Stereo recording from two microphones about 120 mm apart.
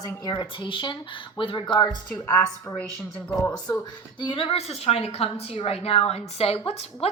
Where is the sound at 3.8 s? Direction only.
40° left (ahead or behind).